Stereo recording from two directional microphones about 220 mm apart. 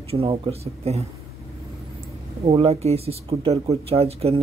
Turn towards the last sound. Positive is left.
turn(degrees=-25)  # may be behind; listen again after turning